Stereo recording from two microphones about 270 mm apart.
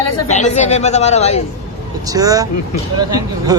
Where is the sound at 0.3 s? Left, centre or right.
Left.